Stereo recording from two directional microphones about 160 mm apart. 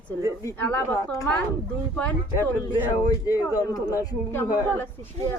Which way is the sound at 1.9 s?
10° left (ahead or behind).